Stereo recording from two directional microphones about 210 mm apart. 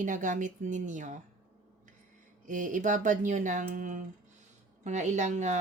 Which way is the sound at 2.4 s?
40° right (ahead or behind).